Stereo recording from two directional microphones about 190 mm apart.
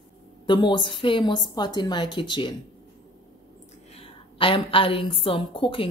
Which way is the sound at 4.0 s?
30° left (ahead or behind).